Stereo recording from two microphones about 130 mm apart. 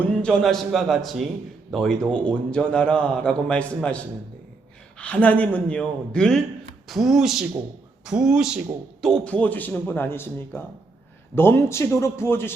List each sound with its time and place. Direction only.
0.0 s a man's voice: 5° left (ahead or behind)